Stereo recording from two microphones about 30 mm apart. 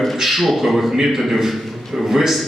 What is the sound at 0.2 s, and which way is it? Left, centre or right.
A man's voice, centre.